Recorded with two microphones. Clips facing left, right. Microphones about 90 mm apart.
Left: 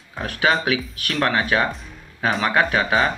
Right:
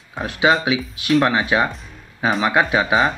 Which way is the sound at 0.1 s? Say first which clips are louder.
Right 3 dB; 15° right (ahead or behind).